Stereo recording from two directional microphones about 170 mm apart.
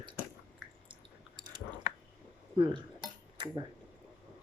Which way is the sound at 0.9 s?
25° right (ahead or behind).